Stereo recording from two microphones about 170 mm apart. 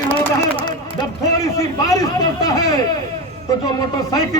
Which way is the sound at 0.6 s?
20° left (ahead or behind).